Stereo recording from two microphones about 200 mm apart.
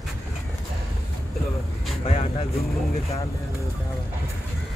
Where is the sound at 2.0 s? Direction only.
30° left (ahead or behind).